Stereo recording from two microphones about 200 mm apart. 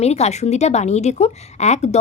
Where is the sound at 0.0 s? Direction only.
35° left (ahead or behind).